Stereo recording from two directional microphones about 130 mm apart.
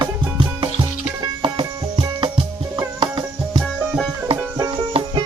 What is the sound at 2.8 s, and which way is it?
Music, 35° right (ahead or behind).